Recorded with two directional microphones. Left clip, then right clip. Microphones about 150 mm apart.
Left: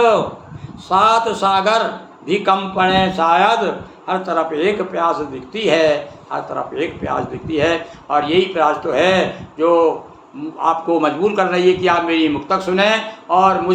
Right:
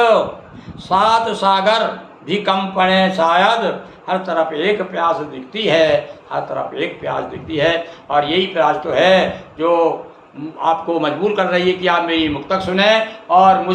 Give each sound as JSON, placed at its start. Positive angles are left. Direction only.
{"t": 0.9, "sound": "a man's voice", "side_deg": 25}